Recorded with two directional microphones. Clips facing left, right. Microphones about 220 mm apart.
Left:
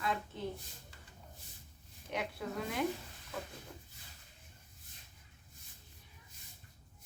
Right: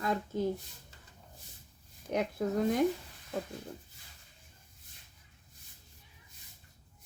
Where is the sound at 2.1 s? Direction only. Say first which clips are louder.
Right 8 dB; 40° right (ahead or behind).